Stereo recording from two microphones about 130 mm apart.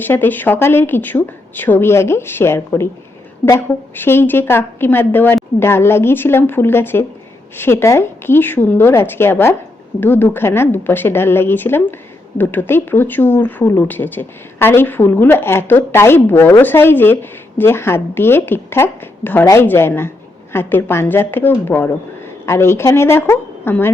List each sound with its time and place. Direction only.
0.0 s a woman's voice: 15° left (ahead or behind)